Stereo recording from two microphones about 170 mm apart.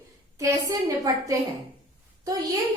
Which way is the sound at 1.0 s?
20° right (ahead or behind).